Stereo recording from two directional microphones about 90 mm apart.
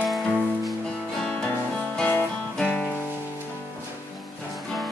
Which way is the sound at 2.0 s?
20° left (ahead or behind).